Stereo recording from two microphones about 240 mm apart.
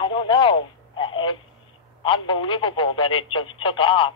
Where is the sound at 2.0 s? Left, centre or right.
Left.